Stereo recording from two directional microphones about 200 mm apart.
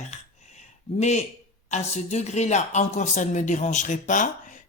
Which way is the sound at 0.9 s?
35° left (ahead or behind).